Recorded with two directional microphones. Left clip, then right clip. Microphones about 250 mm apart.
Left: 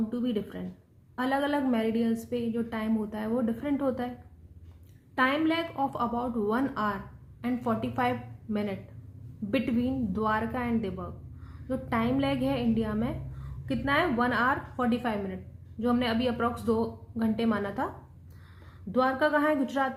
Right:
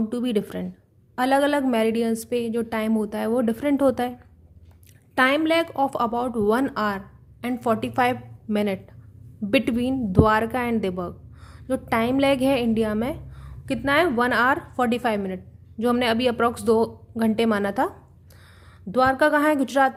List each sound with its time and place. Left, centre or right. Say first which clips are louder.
0.1 s a woman's voice: right 7 dB; right
5.1 s a woman's voice: right 7 dB; right